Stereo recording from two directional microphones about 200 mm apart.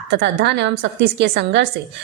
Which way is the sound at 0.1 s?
60° right (ahead or behind).